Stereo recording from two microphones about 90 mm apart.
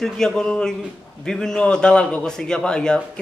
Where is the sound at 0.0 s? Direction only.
5° left (ahead or behind).